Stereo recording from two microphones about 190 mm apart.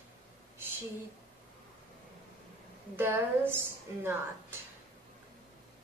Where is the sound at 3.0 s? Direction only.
10° right (ahead or behind).